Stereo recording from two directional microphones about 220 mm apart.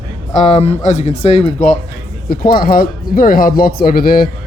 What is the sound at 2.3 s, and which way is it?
Speech, 40° left (ahead or behind).